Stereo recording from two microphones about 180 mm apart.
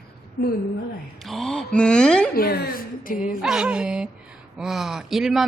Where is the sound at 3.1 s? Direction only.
5° right (ahead or behind).